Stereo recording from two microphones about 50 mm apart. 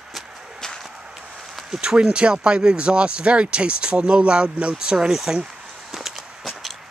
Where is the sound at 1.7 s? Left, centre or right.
Centre.